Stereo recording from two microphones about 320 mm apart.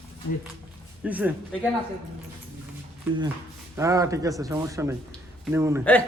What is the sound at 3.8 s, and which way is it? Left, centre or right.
Speech, centre.